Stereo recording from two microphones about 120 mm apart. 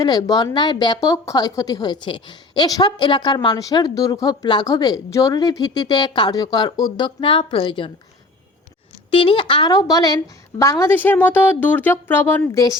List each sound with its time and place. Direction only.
0.0 s a woman's voice: 30° left (ahead or behind)
0.9 s a woman's voice: 25° left (ahead or behind); by 7.9 s 45° left (ahead or behind)
9.0 s a woman's voice: 45° left (ahead or behind); by 12.4 s 15° left (ahead or behind)